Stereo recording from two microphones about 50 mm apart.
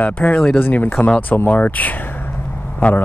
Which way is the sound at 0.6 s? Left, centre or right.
Left.